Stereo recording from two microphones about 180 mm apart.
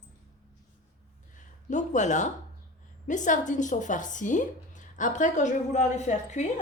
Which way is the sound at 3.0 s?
45° left (ahead or behind).